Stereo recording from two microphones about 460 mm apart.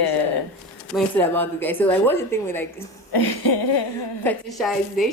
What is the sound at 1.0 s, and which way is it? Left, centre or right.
A woman's voice, centre.